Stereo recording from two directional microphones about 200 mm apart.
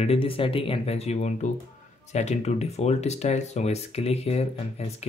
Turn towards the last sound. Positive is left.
turn(degrees=30)  # may be behind; listen again after turning